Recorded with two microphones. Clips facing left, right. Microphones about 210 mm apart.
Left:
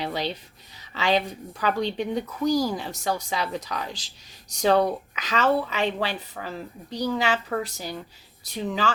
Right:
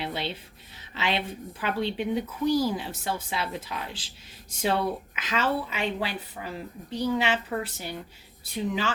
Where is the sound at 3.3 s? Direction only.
5° right (ahead or behind).